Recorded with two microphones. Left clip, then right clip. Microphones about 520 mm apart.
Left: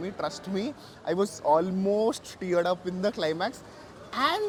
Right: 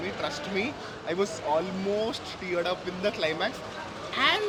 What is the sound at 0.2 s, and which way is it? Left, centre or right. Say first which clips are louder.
Speech: right 1 dB; left.